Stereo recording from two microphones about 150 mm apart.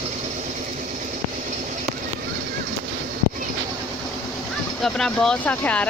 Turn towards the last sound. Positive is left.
turn(degrees=10)  # may be behind; listen again after turning